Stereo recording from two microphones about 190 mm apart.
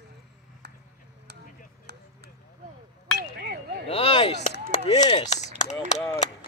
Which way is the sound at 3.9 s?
30° left (ahead or behind).